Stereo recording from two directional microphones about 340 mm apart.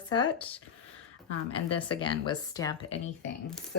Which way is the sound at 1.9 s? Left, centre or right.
Centre.